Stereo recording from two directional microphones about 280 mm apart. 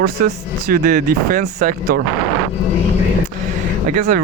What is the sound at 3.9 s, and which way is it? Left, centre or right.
Speech, right.